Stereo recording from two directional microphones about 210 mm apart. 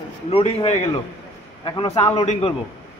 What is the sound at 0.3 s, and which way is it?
A man's voice, 30° left (ahead or behind).